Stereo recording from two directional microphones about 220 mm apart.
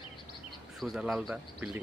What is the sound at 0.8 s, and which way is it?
Speech, centre (ahead or behind).